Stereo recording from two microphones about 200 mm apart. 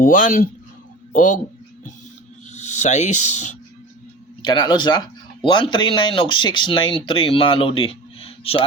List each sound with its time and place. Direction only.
0.0 s speech: 40° left (ahead or behind)
2.5 s speech: 35° left (ahead or behind)
4.4 s speech: 20° left (ahead or behind)